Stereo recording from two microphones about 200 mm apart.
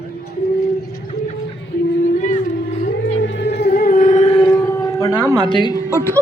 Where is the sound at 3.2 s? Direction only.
60° left (ahead or behind); by 4.6 s 25° left (ahead or behind).